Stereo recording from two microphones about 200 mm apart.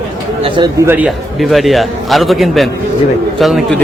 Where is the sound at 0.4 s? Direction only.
25° right (ahead or behind).